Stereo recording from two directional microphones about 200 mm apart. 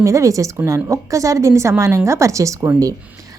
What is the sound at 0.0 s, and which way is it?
Speech, 15° right (ahead or behind).